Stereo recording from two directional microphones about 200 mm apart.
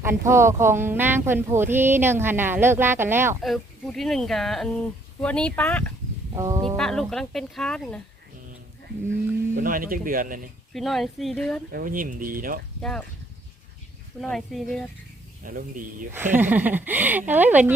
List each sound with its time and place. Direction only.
0.0 s speech: 10° right (ahead or behind)
3.4 s speech: centre (ahead or behind)
6.3 s speech: 15° right (ahead or behind)
6.7 s speech: centre (ahead or behind)
9.6 s speech: 45° right (ahead or behind)
10.8 s speech: centre (ahead or behind)
11.7 s speech: 45° right (ahead or behind)
12.8 s speech: 5° left (ahead or behind)
14.2 s speech: centre (ahead or behind)
15.4 s speech: 40° right (ahead or behind)
16.4 s speech: 10° right (ahead or behind)